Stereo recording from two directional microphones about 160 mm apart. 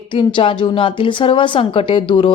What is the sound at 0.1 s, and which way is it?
Speech, 30° left (ahead or behind).